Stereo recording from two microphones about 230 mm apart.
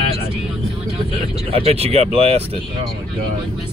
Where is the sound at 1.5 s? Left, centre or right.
Right.